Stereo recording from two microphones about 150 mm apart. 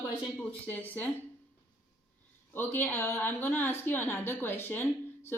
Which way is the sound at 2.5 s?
15° left (ahead or behind).